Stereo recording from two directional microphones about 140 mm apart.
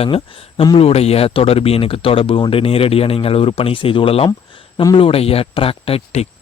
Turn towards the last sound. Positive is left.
turn(degrees=45)  # may be behind; listen again after turning